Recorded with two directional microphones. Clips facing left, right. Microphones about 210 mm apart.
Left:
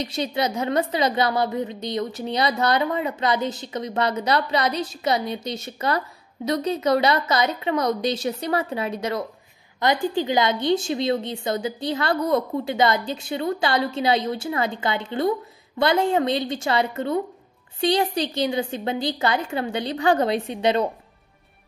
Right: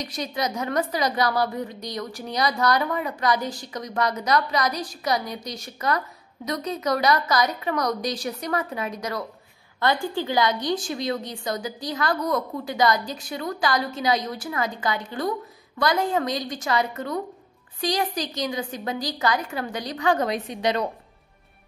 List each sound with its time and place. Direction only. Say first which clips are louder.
0.0 s a woman's voice: left 4 dB; 25° left (ahead or behind)